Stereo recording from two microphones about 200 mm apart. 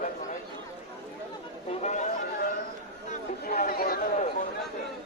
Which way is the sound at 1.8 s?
35° left (ahead or behind).